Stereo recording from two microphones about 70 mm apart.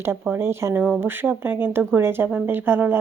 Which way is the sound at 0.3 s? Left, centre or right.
Right.